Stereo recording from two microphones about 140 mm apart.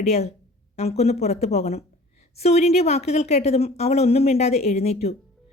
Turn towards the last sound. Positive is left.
turn(degrees=50)  # may be behind; listen again after turning